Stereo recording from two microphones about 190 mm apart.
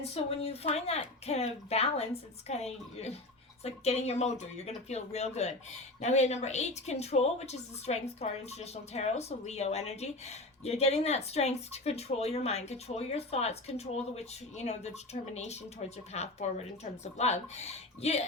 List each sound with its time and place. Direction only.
0.1 s speech: 30° left (ahead or behind)